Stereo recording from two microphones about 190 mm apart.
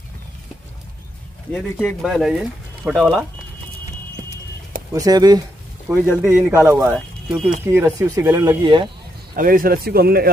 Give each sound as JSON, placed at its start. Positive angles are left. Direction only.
{"t": 1.5, "sound": "speech", "side_deg": 0}
{"t": 4.9, "sound": "speech", "side_deg": -20}
{"t": 5.9, "sound": "speech", "side_deg": -10}
{"t": 9.3, "sound": "speech", "side_deg": -50}